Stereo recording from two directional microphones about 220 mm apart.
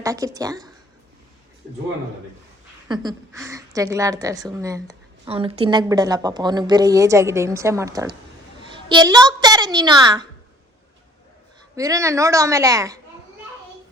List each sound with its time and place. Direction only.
0.0 s a woman's voice: 15° right (ahead or behind)
2.9 s a woman's voice: 20° right (ahead or behind)
11.8 s a woman's voice: 15° right (ahead or behind)